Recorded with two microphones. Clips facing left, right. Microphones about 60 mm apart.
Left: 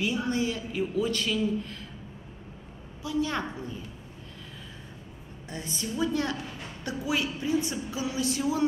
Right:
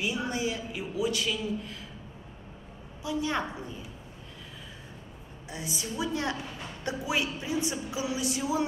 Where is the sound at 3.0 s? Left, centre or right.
Right.